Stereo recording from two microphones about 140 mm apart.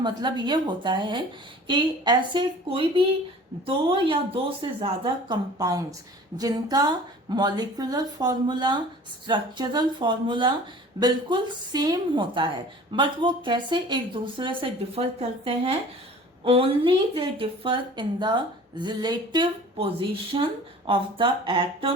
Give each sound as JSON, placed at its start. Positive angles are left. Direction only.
{"t": 0.0, "sound": "speech", "side_deg": -30}
{"t": 5.3, "sound": "a woman's voice", "side_deg": -25}